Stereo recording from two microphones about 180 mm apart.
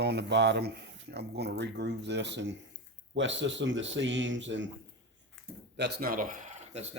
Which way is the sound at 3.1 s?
90° right.